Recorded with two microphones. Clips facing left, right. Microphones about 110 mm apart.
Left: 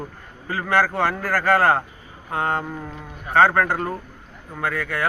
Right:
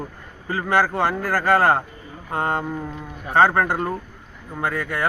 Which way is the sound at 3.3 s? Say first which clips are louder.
Even; 25° right (ahead or behind).